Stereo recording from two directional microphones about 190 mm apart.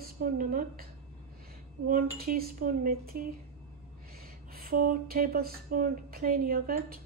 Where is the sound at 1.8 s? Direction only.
50° right (ahead or behind).